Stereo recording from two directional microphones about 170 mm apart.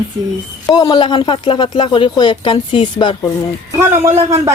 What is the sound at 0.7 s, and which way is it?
Speech, 25° left (ahead or behind).